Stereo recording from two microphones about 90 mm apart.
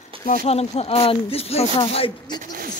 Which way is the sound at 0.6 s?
90° left.